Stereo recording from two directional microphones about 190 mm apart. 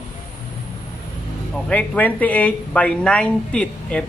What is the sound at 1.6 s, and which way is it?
Speech, 5° left (ahead or behind).